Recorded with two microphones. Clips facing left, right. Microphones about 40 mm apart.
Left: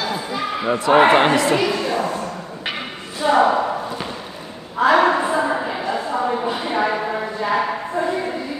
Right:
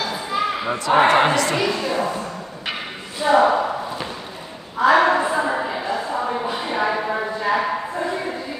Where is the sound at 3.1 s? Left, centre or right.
Centre.